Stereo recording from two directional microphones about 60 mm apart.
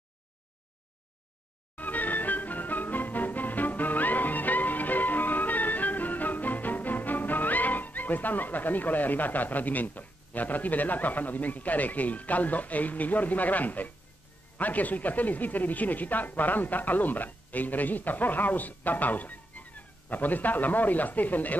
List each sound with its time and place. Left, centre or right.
1.8 s music: left
14.6 s speech: left